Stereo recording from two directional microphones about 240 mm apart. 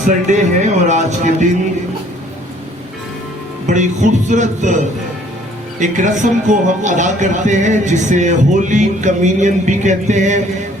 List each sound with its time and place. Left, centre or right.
0.3 s speech: right
3.7 s speech: right